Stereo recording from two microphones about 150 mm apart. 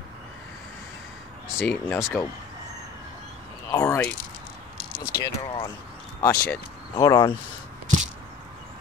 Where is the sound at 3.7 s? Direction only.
15° left (ahead or behind).